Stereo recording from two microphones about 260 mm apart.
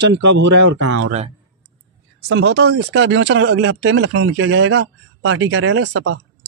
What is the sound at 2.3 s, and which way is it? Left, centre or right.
Speech, right.